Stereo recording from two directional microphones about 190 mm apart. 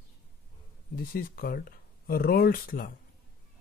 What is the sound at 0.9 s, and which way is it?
Speech, 50° left (ahead or behind).